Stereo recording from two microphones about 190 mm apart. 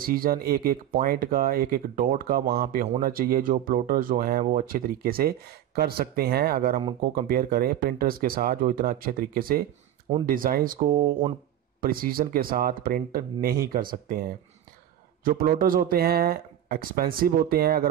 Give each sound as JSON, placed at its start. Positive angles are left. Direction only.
{"t": 0.0, "sound": "speech", "side_deg": -50}